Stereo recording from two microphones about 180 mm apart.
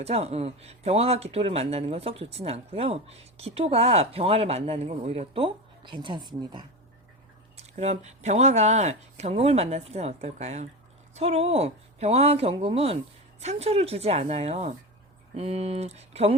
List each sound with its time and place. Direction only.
0.0 s speech: 35° right (ahead or behind)
7.5 s speech: 35° right (ahead or behind)